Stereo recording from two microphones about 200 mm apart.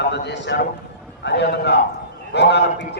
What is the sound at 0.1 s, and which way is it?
A man's voice, 60° left (ahead or behind).